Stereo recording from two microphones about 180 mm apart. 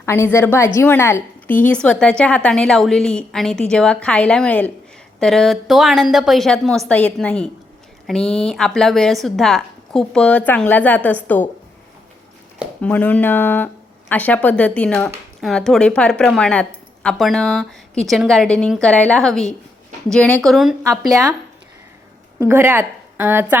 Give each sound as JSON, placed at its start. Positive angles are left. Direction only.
{"t": 0.0, "sound": "a woman's voice", "side_deg": 15}
{"t": 12.8, "sound": "a woman's voice", "side_deg": 5}
{"t": 21.1, "sound": "speech", "side_deg": -20}
{"t": 22.4, "sound": "a woman's voice", "side_deg": -10}